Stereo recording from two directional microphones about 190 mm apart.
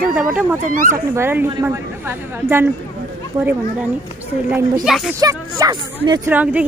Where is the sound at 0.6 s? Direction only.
45° right (ahead or behind).